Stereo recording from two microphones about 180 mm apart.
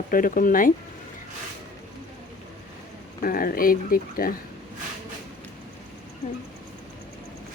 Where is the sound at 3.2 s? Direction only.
55° left (ahead or behind).